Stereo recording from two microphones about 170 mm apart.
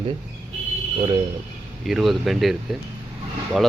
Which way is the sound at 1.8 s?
Centre (ahead or behind).